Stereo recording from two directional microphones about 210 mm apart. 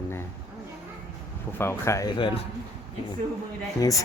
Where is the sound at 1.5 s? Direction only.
10° left (ahead or behind).